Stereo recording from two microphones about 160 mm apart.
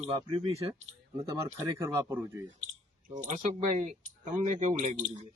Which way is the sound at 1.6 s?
15° right (ahead or behind).